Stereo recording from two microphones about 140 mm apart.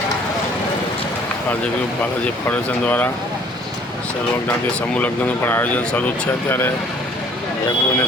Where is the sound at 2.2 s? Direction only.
10° left (ahead or behind).